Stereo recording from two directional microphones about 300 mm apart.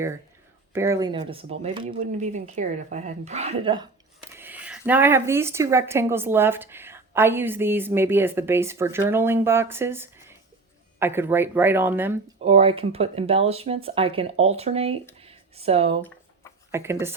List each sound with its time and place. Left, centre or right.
0.7 s a woman's voice: centre
4.4 s a sound: centre
4.9 s a woman's voice: centre
12.4 s speech: centre
15.2 s a sound: centre
16.7 s a woman's voice: centre